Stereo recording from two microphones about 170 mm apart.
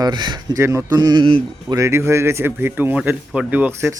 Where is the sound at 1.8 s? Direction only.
15° right (ahead or behind).